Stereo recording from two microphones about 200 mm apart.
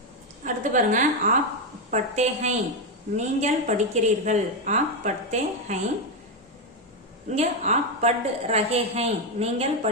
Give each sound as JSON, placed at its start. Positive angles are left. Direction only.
{"t": 0.4, "sound": "a woman's voice", "side_deg": -40}
{"t": 7.3, "sound": "a woman's voice", "side_deg": -35}